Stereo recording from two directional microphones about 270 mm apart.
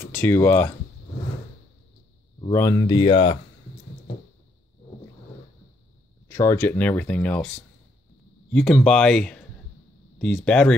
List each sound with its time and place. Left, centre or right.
0.0 s speech: centre
2.4 s speech: centre
6.2 s speech: centre